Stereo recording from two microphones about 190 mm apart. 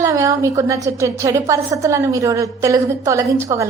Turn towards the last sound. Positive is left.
turn(degrees=-15)  # may be behind; listen again after turning